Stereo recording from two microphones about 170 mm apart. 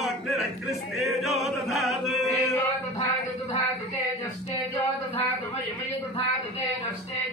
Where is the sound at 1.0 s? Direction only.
Centre (ahead or behind).